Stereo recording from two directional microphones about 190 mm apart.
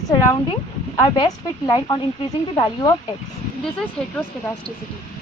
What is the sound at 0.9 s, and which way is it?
Speech, 20° left (ahead or behind).